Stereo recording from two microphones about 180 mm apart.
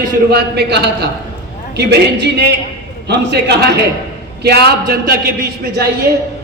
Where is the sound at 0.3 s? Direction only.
65° right (ahead or behind).